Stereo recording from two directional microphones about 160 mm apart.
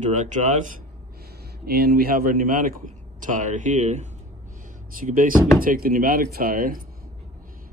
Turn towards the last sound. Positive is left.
turn(degrees=-60)  # may be behind; listen again after turning